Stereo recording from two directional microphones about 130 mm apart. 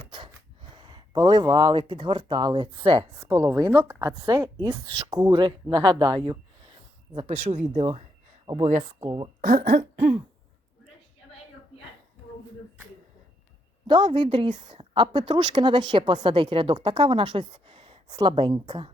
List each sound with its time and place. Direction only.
0.0 s wheeze: 40° right (ahead or behind)
0.8 s speech: 35° right (ahead or behind)
3.1 s speech: 20° right (ahead or behind)
9.4 s a sound: 85° right
13.8 s speech: 40° right (ahead or behind)